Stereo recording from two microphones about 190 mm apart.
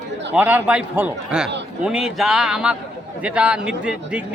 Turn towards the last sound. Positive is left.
turn(degrees=-5)  # may be behind; listen again after turning